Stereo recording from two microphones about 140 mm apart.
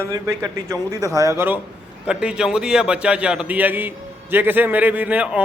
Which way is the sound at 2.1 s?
5° right (ahead or behind).